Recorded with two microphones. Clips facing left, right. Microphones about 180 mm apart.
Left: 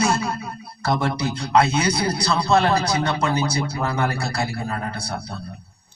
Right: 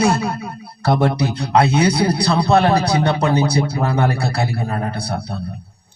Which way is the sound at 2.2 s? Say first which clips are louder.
Right 3 dB; 30° right (ahead or behind).